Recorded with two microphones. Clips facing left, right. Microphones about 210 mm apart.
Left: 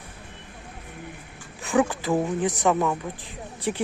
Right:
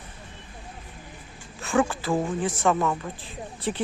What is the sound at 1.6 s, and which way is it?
A man's voice, 15° left (ahead or behind).